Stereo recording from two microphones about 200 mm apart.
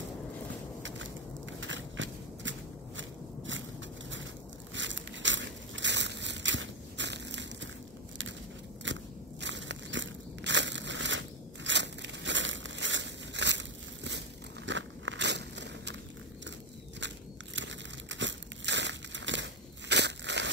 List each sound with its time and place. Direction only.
0.8 s a sound: 65° right (ahead or behind)
1.6 s biting: 70° right (ahead or behind)
4.7 s biting: 65° right (ahead or behind)
8.9 s biting: 65° right (ahead or behind)
9.4 s crushing: 65° right (ahead or behind)
14.7 s biting: 65° right (ahead or behind)
17.6 s crumpling: 65° right (ahead or behind)